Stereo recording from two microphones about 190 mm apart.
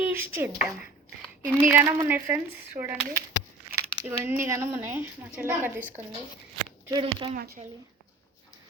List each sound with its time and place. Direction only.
0.0 s speech: 10° right (ahead or behind)
6.8 s speech: 25° right (ahead or behind)